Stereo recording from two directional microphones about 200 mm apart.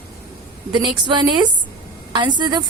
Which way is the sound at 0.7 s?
25° right (ahead or behind).